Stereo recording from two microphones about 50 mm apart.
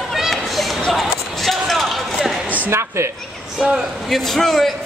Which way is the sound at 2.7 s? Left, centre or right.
Right.